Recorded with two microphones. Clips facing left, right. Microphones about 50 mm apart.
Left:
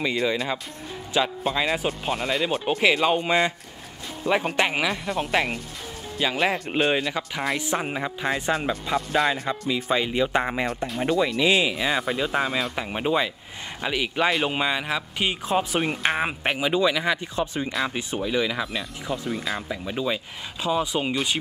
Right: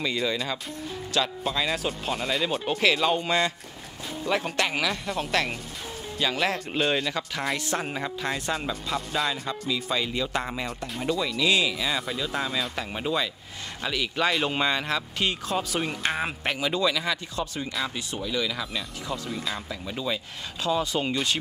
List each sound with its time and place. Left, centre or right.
0.0 s speech: centre
15.5 s speech: left; by 21.4 s centre